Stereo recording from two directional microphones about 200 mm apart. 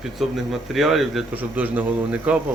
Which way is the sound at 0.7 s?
Centre (ahead or behind).